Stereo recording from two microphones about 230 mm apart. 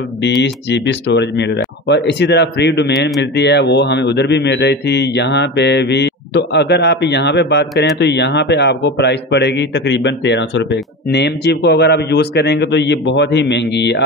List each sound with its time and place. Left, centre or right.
0.2 s speech: left